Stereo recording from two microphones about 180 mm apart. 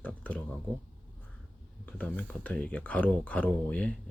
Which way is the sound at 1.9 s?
5° left (ahead or behind).